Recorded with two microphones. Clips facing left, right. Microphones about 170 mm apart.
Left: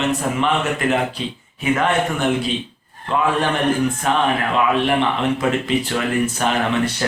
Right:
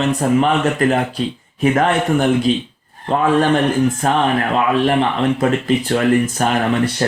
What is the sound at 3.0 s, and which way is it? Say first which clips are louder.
A man's voice: right 5 dB; 40° right (ahead or behind).